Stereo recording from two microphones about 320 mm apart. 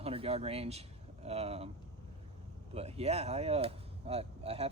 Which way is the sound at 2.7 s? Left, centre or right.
Centre.